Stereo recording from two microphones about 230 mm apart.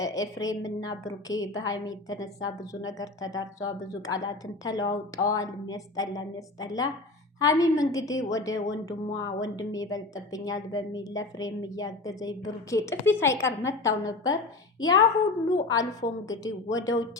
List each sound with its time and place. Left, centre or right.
0.0 s a woman's voice: centre